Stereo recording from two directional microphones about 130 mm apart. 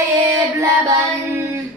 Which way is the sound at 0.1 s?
25° right (ahead or behind).